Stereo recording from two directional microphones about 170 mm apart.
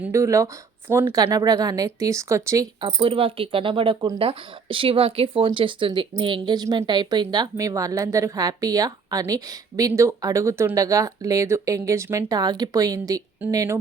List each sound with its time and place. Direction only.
0.0 s speech: 15° right (ahead or behind)
2.8 s speech: 30° right (ahead or behind)